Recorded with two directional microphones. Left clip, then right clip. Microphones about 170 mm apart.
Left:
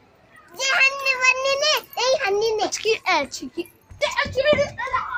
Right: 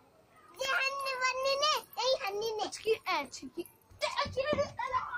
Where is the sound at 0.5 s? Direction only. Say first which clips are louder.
Left 13 dB; 50° left (ahead or behind).